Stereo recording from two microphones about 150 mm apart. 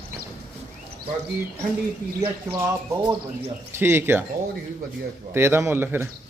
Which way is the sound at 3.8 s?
15° right (ahead or behind).